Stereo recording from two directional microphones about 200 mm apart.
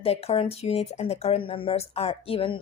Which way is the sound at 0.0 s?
30° left (ahead or behind).